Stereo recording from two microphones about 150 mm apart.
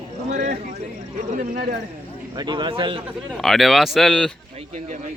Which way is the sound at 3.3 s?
Centre (ahead or behind).